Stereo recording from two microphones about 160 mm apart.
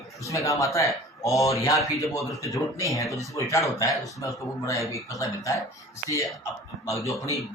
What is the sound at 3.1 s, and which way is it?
Speech, 20° left (ahead or behind).